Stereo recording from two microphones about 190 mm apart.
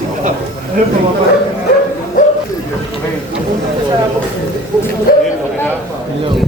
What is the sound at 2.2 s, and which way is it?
Bow-wow, 45° left (ahead or behind).